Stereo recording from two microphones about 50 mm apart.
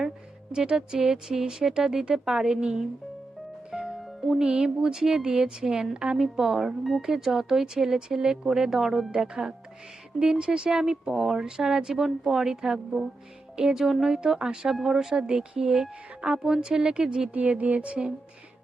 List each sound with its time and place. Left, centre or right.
0.5 s speech: centre
9.1 s speech: centre
17.3 s speech: right